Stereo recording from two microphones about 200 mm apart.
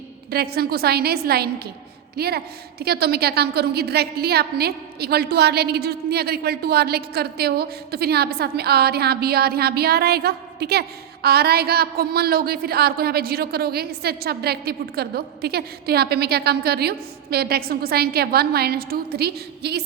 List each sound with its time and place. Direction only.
0.3 s a woman's voice: 50° right (ahead or behind)